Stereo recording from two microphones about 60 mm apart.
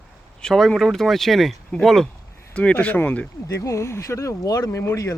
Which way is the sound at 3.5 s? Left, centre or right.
Left.